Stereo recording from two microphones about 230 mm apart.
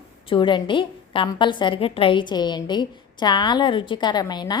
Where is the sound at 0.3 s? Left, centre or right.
Left.